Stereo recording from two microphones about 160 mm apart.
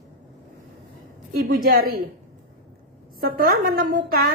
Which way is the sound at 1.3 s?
60° right (ahead or behind).